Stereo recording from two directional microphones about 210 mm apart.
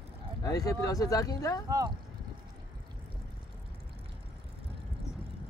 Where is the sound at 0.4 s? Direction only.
15° left (ahead or behind).